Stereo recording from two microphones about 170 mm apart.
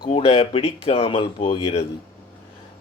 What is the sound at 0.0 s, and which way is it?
Speech, 35° left (ahead or behind).